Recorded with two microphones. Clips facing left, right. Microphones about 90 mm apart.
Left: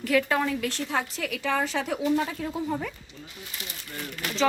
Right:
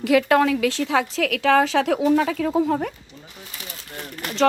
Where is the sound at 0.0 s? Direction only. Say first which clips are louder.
Right 7 dB; 90° right.